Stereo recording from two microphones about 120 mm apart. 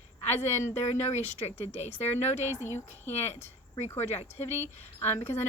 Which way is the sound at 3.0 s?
65° left (ahead or behind).